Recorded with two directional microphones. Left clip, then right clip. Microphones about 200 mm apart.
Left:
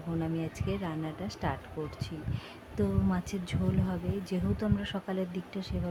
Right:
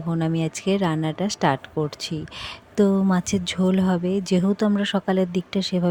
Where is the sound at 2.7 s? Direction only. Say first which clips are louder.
Right 12 dB; 40° right (ahead or behind).